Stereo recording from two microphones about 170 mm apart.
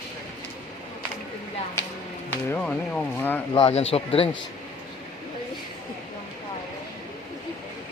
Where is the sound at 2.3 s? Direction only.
10° left (ahead or behind).